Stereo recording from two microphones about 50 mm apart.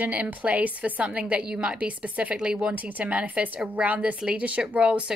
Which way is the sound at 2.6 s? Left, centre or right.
Right.